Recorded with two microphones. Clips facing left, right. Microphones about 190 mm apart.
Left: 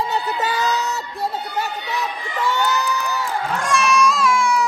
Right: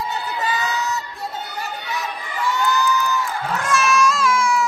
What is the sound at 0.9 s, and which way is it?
Crowd, 65° left (ahead or behind).